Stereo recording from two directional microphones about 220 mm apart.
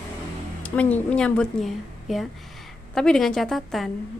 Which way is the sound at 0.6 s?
5° left (ahead or behind).